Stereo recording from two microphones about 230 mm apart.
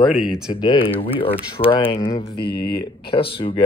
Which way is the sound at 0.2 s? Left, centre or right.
Centre.